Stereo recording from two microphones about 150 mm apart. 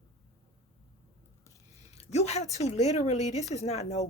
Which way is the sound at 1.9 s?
45° left (ahead or behind).